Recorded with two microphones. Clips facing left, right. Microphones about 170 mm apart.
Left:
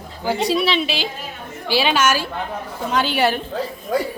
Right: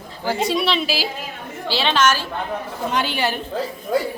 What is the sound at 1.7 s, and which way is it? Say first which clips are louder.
A woman's voice: left 1 dB; 10° left (ahead or behind).